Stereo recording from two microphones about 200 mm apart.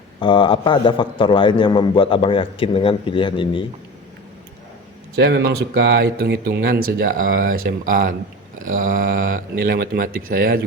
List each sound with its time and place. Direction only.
0.2 s a man's voice: 25° left (ahead or behind)
5.1 s speech: 55° right (ahead or behind)